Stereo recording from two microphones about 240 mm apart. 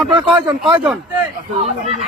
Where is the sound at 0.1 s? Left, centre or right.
Centre.